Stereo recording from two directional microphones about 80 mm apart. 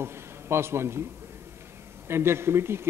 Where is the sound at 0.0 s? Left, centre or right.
Right.